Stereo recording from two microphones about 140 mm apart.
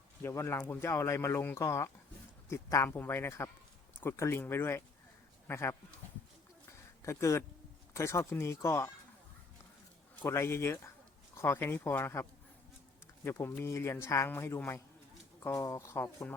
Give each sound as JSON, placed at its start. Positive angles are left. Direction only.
{"t": 0.2, "sound": "speech", "side_deg": 20}
{"t": 6.7, "sound": "a sound", "side_deg": 20}
{"t": 7.9, "sound": "speech", "side_deg": 20}
{"t": 10.2, "sound": "speech", "side_deg": 20}
{"t": 13.2, "sound": "speech", "side_deg": 20}